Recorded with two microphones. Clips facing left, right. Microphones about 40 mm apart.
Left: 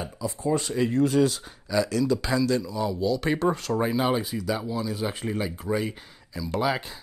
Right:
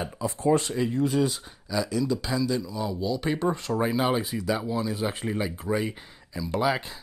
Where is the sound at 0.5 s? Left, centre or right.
Right.